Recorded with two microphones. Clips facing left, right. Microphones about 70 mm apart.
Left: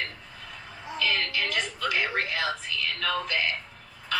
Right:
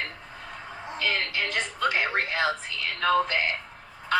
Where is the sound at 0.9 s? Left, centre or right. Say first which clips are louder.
Even; right.